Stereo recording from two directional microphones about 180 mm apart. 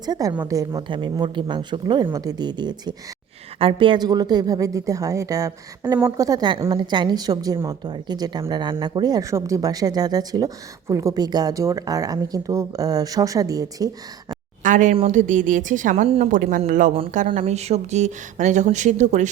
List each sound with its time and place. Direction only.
0.0 s speech: 20° right (ahead or behind)
14.6 s a sound: 45° right (ahead or behind)
15.0 s speech: 45° right (ahead or behind)